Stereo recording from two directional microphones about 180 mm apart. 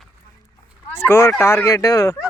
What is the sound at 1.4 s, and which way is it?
Speech, 15° left (ahead or behind).